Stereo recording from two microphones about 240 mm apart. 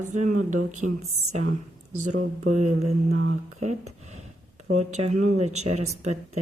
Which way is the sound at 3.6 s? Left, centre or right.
Right.